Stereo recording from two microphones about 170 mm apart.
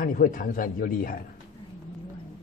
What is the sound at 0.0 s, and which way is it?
A man's voice, 50° left (ahead or behind).